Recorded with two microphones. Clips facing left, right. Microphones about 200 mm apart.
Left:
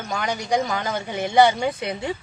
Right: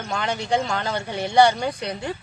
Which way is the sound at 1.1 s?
15° left (ahead or behind).